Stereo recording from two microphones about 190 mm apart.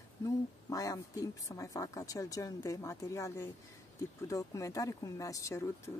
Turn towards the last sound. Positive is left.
turn(degrees=15)  # may be behind; listen again after turning